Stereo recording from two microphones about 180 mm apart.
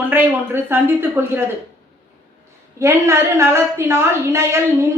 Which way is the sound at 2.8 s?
15° right (ahead or behind).